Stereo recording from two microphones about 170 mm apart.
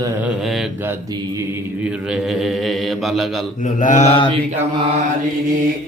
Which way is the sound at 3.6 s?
45° left (ahead or behind).